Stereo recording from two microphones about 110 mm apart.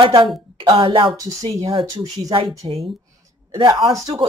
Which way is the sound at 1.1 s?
30° right (ahead or behind).